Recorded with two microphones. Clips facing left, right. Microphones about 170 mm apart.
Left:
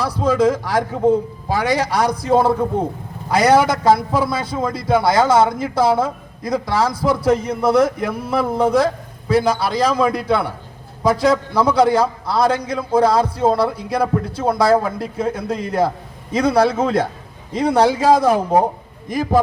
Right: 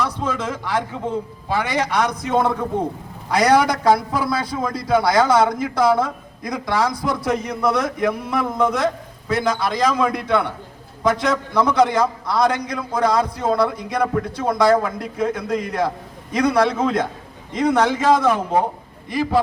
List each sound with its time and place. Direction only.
0.0 s a man's voice: 35° left (ahead or behind)